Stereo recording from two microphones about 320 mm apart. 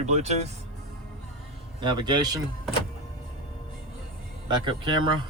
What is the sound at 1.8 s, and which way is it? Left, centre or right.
Speech, centre.